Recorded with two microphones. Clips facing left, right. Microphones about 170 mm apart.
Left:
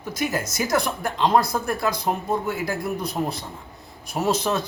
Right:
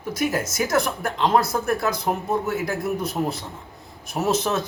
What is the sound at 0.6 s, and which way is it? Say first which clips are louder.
A man's voice: even; centre (ahead or behind).